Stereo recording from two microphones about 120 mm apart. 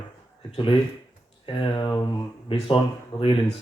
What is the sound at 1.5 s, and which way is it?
Speech, 40° left (ahead or behind).